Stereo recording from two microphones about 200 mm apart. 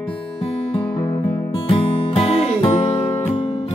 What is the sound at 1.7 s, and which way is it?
Music, 25° left (ahead or behind).